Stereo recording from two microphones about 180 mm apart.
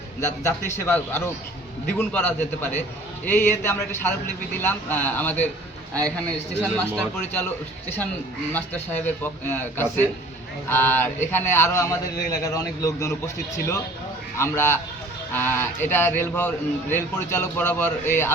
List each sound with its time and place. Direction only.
0.2 s a man's voice: 15° left (ahead or behind)
8.5 s a man's voice: 10° left (ahead or behind)